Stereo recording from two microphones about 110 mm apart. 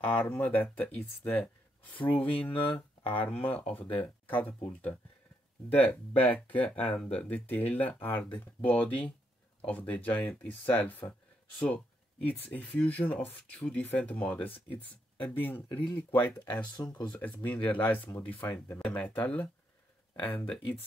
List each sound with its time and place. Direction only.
0.0 s speech: 10° left (ahead or behind)
5.7 s speech: 15° left (ahead or behind)